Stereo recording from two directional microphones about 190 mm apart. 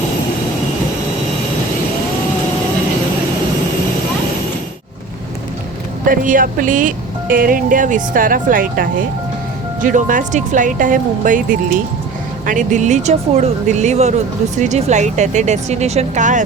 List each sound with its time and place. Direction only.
6.1 s speech: 45° right (ahead or behind)
9.8 s speech: 45° right (ahead or behind)
12.5 s speech: 40° right (ahead or behind)